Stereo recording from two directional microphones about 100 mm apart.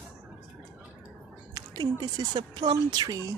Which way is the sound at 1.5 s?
45° right (ahead or behind).